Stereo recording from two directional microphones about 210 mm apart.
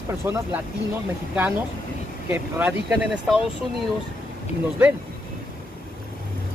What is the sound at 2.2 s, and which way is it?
Speech, 10° right (ahead or behind).